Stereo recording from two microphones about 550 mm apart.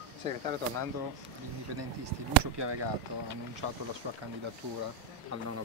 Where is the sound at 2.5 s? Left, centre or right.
Right.